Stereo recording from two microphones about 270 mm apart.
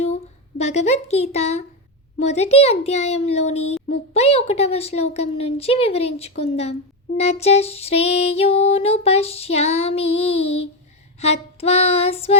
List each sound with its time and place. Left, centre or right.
0.6 s music: left